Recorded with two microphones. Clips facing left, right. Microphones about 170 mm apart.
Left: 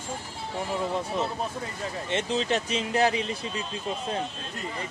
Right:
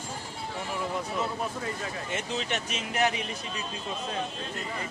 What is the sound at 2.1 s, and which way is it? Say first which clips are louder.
Speech: left 7 dB; 30° left (ahead or behind).